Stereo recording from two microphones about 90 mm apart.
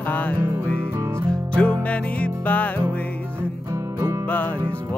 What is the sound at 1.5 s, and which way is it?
Music, 15° left (ahead or behind).